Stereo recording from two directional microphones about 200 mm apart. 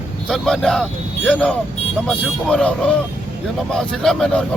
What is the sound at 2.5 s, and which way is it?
A man's voice, 5° left (ahead or behind).